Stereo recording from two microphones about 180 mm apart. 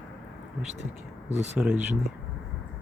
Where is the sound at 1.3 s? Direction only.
40° right (ahead or behind).